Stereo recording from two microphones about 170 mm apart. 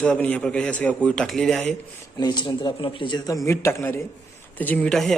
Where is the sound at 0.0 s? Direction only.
5° left (ahead or behind).